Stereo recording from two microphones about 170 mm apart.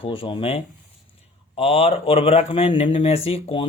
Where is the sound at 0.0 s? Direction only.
30° left (ahead or behind).